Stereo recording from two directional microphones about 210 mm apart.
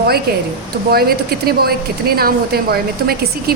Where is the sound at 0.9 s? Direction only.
45° right (ahead or behind).